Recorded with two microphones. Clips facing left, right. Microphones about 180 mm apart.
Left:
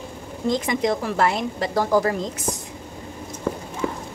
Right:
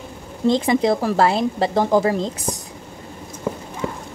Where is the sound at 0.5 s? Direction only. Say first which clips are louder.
Right 5 dB; 30° right (ahead or behind).